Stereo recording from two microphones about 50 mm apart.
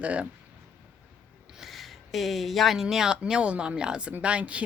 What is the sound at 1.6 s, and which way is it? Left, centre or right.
Speech, centre.